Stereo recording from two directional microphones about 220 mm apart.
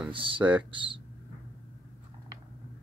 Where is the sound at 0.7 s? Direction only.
20° right (ahead or behind).